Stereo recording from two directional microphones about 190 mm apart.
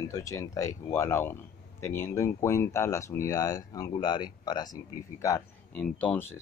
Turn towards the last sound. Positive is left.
turn(degrees=5)  # may be behind; listen again after turning